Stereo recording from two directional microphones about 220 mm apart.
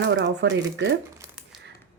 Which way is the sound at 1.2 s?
5° right (ahead or behind).